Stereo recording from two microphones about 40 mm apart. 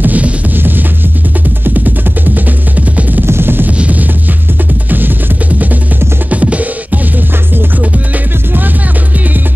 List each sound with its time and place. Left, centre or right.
0.0 s music: right
0.6 s music: right
2.3 s music: right
3.3 s music: right
3.7 s music: right
4.8 s music: right
6.3 s music: right